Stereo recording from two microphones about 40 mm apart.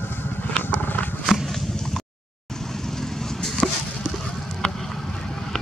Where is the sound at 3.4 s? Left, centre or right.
Centre.